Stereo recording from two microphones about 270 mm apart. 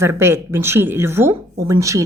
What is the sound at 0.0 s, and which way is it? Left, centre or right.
A woman's voice, centre.